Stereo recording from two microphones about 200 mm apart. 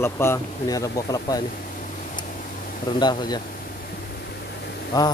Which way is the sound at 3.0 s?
20° left (ahead or behind).